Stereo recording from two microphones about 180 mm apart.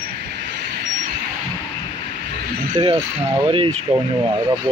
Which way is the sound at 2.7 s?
25° right (ahead or behind).